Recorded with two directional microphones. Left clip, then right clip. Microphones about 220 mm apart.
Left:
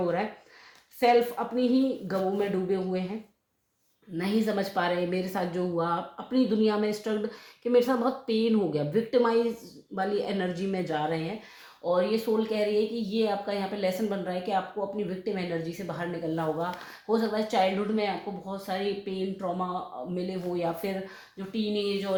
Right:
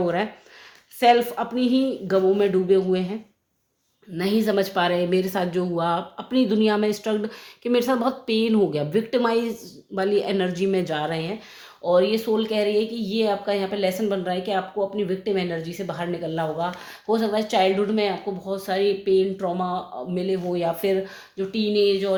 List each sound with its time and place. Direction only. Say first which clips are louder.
0.9 s speech: right 5 dB; 40° right (ahead or behind)
4.2 s speech: right 7 dB; 45° right (ahead or behind)